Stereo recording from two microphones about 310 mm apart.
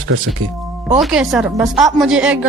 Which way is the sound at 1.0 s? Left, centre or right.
Centre.